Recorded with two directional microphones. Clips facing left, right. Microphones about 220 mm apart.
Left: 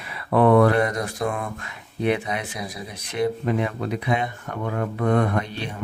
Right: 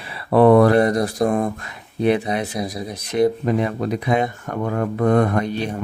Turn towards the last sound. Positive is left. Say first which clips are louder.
# right 5 dB
turn(degrees=-45)  # may be behind; listen again after turning